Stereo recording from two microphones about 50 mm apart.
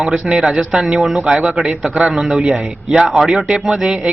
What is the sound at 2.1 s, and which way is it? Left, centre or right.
Speech, centre.